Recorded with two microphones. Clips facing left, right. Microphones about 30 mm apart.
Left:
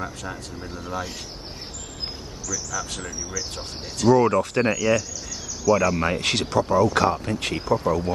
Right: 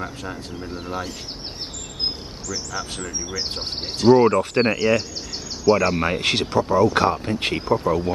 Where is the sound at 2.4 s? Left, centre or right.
Right.